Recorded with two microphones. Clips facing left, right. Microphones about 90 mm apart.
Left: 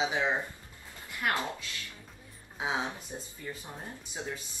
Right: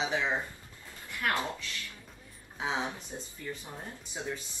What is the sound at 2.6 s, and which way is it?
Speech, 20° left (ahead or behind).